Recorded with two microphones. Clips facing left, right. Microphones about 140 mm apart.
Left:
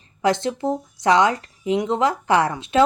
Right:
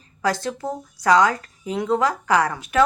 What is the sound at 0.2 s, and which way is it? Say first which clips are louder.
Speech: left 3 dB; 25° left (ahead or behind).